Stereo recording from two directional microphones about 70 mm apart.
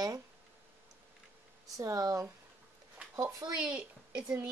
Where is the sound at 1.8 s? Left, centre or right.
Right.